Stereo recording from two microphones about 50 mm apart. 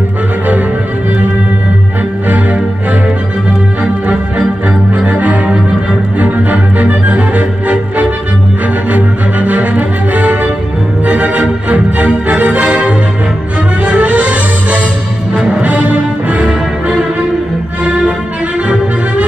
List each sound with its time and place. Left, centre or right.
2.2 s music: right
4.9 s music: right
8.9 s cello: right
11.1 s music: right